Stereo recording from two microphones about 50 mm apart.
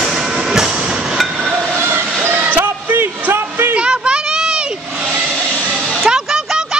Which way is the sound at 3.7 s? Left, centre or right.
Right.